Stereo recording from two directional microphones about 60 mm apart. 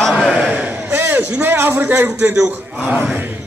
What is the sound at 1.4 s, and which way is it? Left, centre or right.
Speech, right.